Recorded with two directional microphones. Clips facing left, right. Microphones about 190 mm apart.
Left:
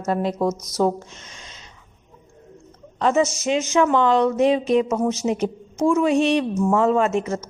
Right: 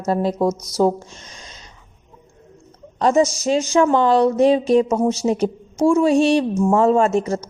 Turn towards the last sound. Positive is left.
turn(degrees=-35)  # may be behind; listen again after turning